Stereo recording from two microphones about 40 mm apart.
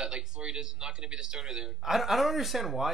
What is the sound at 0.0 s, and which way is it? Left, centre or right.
Speech, right.